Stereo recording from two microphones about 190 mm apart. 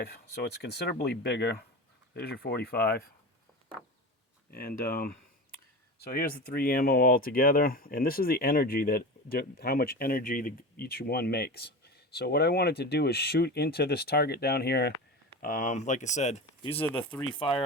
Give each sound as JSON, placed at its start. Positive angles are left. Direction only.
{"t": 0.0, "sound": "speech", "side_deg": 60}
{"t": 4.5, "sound": "speech", "side_deg": 50}
{"t": 15.4, "sound": "speech", "side_deg": 45}
{"t": 16.6, "sound": "speech", "side_deg": 10}